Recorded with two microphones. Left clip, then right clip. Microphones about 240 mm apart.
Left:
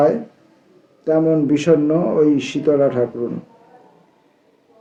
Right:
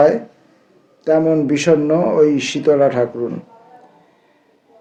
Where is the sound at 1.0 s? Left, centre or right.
Right.